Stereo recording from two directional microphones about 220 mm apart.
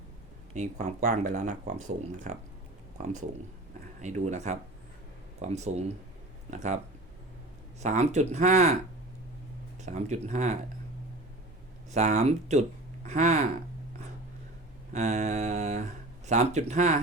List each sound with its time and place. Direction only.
0.5 s speech: 35° right (ahead or behind)
7.8 s speech: 30° right (ahead or behind)
9.8 s speech: 30° right (ahead or behind)
11.9 s speech: 30° right (ahead or behind)
14.9 s speech: 30° right (ahead or behind)